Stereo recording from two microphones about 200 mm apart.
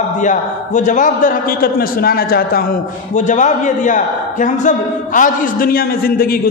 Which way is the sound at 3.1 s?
35° left (ahead or behind).